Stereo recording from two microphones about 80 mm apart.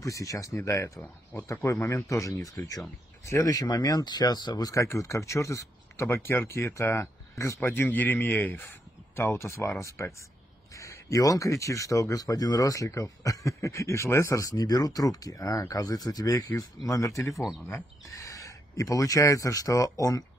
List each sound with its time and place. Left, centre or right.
0.0 s speech: left
4.8 s speech: left